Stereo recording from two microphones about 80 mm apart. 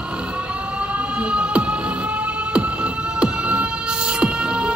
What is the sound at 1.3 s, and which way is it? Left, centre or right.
Music, centre.